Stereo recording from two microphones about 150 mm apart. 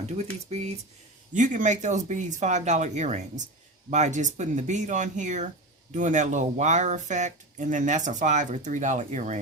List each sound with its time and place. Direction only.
0.5 s speech: 45° right (ahead or behind)